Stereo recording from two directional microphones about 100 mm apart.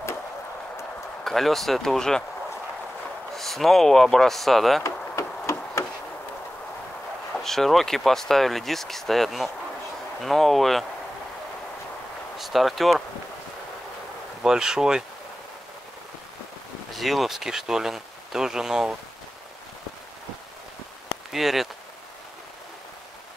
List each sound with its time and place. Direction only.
1.2 s speech: centre (ahead or behind)
3.3 s speech: centre (ahead or behind)
5.1 s hammer: 30° left (ahead or behind)
7.3 s speech: 5° left (ahead or behind)
12.4 s speech: centre (ahead or behind)
14.4 s speech: 5° right (ahead or behind)
16.9 s speech: centre (ahead or behind)
21.3 s speech: centre (ahead or behind)